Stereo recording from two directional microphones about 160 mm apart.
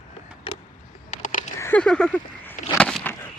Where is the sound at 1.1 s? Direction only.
50° left (ahead or behind).